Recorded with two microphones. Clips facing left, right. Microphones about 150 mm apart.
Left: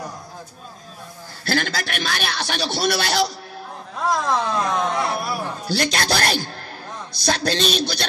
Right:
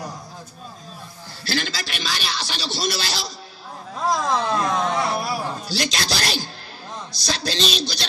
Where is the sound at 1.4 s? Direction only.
55° left (ahead or behind).